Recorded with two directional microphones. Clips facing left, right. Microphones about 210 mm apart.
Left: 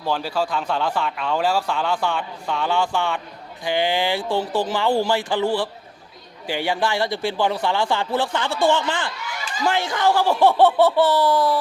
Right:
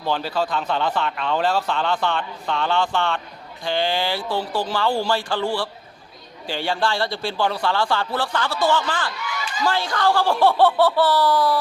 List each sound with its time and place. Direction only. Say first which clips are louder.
0.0 s a man's voice: even; 5° left (ahead or behind); by 11.5 s 25° left (ahead or behind)